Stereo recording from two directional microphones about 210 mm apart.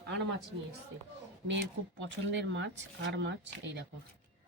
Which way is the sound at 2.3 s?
60° right (ahead or behind).